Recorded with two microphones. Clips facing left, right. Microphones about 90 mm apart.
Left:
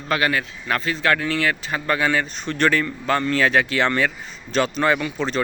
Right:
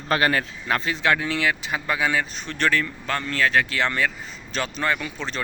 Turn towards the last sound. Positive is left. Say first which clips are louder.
# left 7 dB
turn(degrees=0)  # may be behind; listen again after turning